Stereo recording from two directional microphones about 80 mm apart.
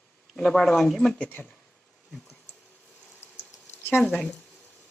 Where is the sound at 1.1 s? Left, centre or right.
Centre.